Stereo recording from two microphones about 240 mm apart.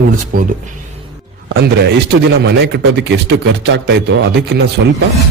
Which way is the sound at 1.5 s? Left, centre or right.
Right.